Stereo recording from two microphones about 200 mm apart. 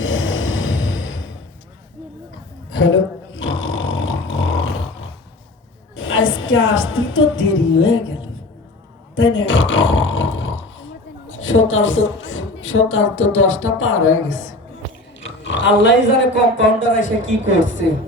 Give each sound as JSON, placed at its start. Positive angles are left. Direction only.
{"t": 0.0, "sound": "a sound", "side_deg": 80}
{"t": 3.3, "sound": "a sound", "side_deg": 75}
{"t": 6.0, "sound": "a woman's voice", "side_deg": 75}
{"t": 9.1, "sound": "roar", "side_deg": 75}
{"t": 11.3, "sound": "a woman's voice", "side_deg": 80}
{"t": 15.4, "sound": "speech", "side_deg": 65}